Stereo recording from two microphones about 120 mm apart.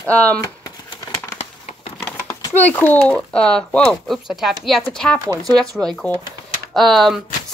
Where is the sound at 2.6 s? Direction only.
15° left (ahead or behind).